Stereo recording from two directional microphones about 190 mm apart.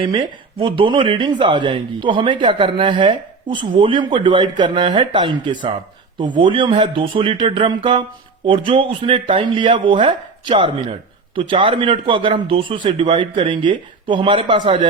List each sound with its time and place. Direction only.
0.0 s speech: 25° right (ahead or behind)